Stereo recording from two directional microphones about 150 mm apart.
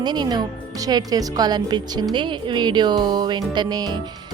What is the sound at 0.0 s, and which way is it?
Speech, 30° right (ahead or behind).